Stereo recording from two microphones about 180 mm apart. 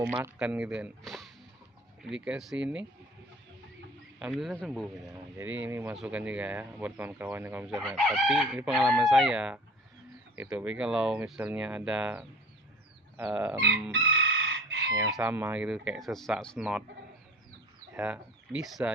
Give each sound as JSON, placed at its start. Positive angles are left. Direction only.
{"t": 0.1, "sound": "speech", "side_deg": -5}
{"t": 4.2, "sound": "speech", "side_deg": 0}
{"t": 7.8, "sound": "speech", "side_deg": 5}
{"t": 13.9, "sound": "chicken", "side_deg": -90}
{"t": 15.1, "sound": "speech", "side_deg": -10}
{"t": 17.9, "sound": "speech", "side_deg": -5}